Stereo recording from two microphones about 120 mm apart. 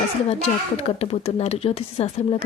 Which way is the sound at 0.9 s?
55° left (ahead or behind).